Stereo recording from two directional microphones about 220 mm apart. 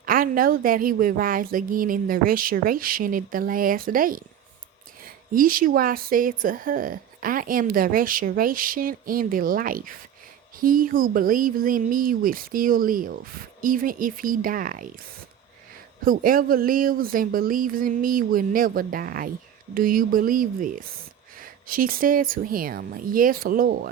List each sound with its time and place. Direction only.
0.0 s a woman's voice: 40° right (ahead or behind)
16.0 s a woman's voice: 40° right (ahead or behind)